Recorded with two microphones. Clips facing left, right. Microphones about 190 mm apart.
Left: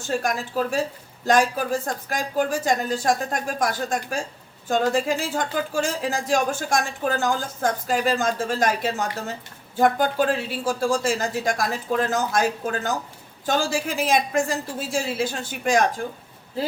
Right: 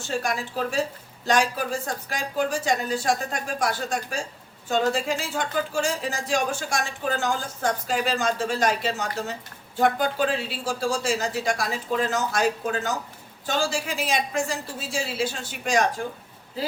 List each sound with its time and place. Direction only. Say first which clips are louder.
0.1 s speech: left 3 dB; 45° left (ahead or behind)